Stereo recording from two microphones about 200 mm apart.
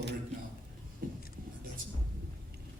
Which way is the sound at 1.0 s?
45° right (ahead or behind).